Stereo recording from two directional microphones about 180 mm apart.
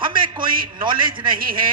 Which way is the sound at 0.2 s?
55° right (ahead or behind).